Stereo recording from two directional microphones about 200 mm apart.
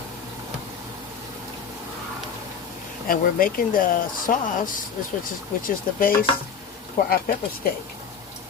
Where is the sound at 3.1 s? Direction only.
45° left (ahead or behind).